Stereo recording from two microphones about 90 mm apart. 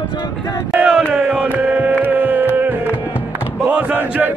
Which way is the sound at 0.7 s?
10° right (ahead or behind).